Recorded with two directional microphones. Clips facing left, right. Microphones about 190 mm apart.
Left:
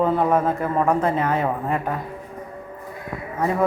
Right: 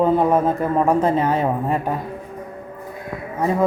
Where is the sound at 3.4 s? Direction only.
25° right (ahead or behind).